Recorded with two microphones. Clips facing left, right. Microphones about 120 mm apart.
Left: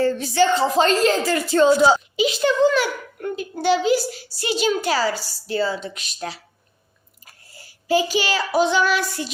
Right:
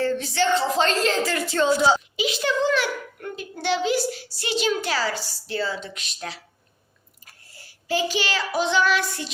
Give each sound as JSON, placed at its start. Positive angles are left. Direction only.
{"t": 0.0, "sound": "a woman's voice", "side_deg": 10}
{"t": 7.9, "sound": "child singing", "side_deg": 10}